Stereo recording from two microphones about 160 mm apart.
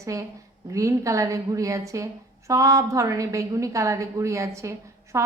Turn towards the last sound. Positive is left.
turn(degrees=-20)  # may be behind; listen again after turning